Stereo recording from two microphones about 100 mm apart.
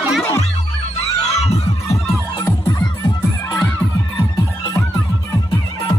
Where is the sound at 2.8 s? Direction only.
45° left (ahead or behind).